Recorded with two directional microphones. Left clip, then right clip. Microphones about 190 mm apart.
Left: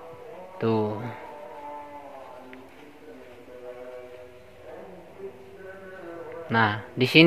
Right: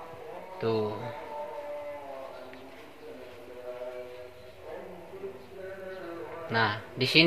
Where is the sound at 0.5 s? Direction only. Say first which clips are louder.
Left 4 dB; 55° left (ahead or behind).